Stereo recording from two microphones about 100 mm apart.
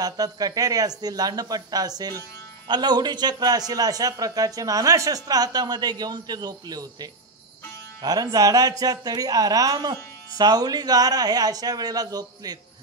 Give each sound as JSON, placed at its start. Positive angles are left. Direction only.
{"t": 0.0, "sound": "a man's voice", "side_deg": -40}